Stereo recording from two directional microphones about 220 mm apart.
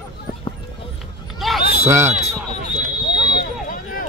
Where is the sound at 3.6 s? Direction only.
40° left (ahead or behind).